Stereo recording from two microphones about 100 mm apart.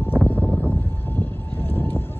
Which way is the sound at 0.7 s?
20° left (ahead or behind).